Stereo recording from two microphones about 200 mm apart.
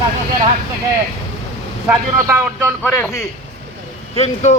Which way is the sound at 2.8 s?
10° left (ahead or behind).